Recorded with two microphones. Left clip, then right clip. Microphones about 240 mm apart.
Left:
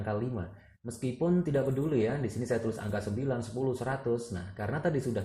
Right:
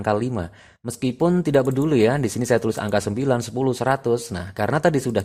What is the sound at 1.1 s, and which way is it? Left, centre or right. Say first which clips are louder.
Speech: right 11 dB; right.